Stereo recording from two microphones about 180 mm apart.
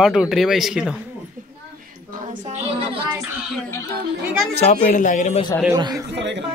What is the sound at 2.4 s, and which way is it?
Speech, 40° right (ahead or behind).